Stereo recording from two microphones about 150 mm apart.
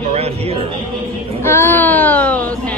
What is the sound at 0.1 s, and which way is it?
Speech, 45° right (ahead or behind).